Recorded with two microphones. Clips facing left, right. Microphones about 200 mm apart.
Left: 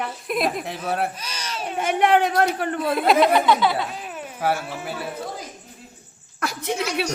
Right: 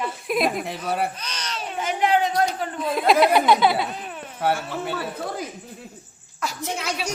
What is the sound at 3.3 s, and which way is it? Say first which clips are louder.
Speech: right 1 dB; 15° right (ahead or behind).